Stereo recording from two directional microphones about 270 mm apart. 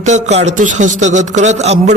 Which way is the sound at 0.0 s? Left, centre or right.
Right.